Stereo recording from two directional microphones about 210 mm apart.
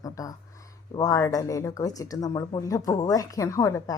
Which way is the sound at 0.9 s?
15° left (ahead or behind).